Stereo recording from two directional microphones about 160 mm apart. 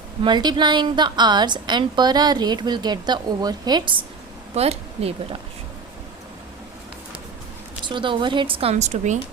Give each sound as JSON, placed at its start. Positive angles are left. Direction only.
{"t": 0.2, "sound": "a woman's voice", "side_deg": -30}
{"t": 4.5, "sound": "a woman's voice", "side_deg": -40}
{"t": 7.9, "sound": "a woman's voice", "side_deg": -30}